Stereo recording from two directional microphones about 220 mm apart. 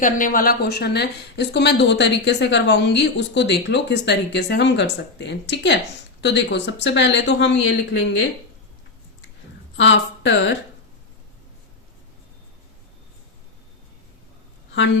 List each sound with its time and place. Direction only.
0.0 s a woman's voice: 35° left (ahead or behind); by 8.2 s 55° left (ahead or behind)
9.7 s speech: 55° left (ahead or behind)